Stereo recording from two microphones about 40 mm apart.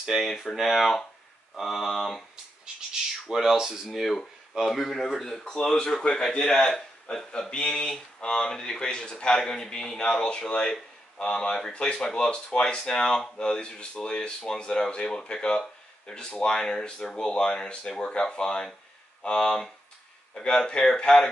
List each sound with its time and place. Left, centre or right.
0.0 s speech: centre
0.5 s speech: centre
2.6 s a sound: centre
3.5 s speech: centre
4.6 s speech: centre